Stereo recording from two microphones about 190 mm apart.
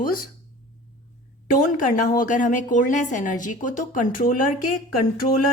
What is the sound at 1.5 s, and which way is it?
A woman's voice, 45° left (ahead or behind).